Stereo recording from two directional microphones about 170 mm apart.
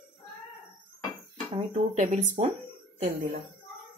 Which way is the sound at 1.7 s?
45° right (ahead or behind).